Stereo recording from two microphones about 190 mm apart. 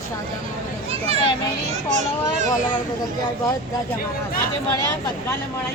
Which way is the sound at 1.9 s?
40° right (ahead or behind).